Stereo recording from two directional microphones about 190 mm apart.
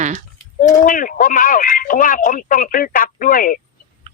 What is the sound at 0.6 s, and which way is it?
Speech, 45° left (ahead or behind).